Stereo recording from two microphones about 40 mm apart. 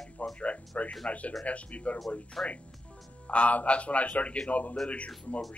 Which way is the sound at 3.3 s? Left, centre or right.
Left.